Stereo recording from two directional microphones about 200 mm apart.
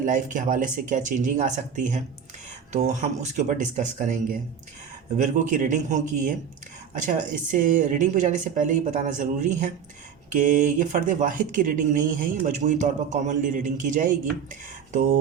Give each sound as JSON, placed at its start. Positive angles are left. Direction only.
{"t": 0.0, "sound": "speech", "side_deg": -40}